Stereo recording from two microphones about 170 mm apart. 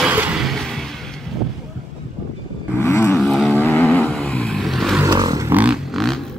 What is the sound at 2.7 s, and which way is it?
Vehicle, 15° left (ahead or behind).